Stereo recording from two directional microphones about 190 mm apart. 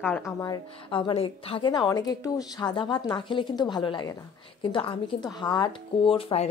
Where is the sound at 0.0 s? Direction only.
15° left (ahead or behind).